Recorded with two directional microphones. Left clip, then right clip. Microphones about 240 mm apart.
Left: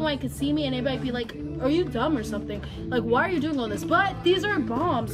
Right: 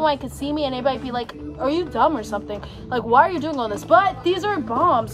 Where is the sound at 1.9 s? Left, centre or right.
Right.